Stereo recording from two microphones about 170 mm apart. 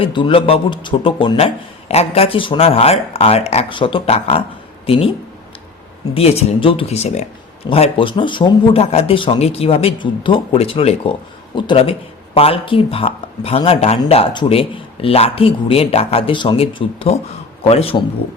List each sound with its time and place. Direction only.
0.0 s a man's voice: 30° left (ahead or behind)
6.1 s a man's voice: 35° left (ahead or behind)